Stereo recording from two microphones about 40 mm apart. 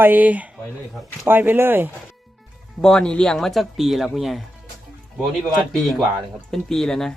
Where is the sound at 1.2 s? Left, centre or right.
Right.